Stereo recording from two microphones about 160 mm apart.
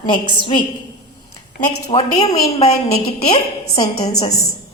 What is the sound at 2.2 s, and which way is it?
Speech, 40° left (ahead or behind).